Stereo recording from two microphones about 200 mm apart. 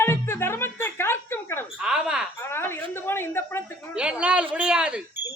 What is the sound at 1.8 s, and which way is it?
Speech, 5° right (ahead or behind).